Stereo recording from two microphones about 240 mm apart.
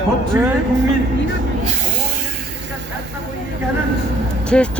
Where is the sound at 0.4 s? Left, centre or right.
Centre.